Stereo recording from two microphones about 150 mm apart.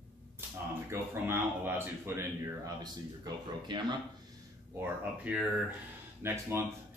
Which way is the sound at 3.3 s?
25° right (ahead or behind).